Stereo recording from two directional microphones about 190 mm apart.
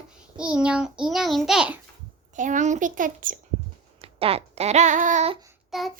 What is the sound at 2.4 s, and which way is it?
A child's voice, 40° right (ahead or behind).